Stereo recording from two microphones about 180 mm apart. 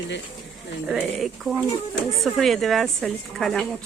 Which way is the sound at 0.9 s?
Centre (ahead or behind).